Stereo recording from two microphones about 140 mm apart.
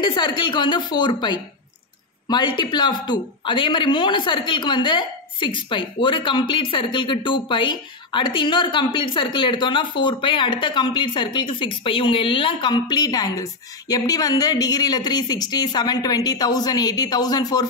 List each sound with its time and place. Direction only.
0.0 s speech: 35° left (ahead or behind)